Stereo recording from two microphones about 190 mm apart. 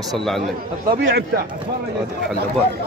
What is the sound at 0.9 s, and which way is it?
Speech, 65° right (ahead or behind).